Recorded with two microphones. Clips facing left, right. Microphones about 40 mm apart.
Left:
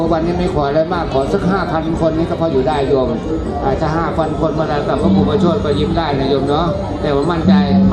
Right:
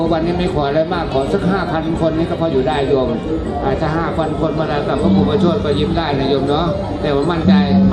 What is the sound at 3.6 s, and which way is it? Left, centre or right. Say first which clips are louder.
Speech: left 2 dB; right.